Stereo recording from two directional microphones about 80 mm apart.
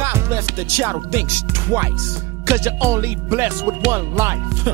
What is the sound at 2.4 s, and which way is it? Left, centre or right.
Music, right.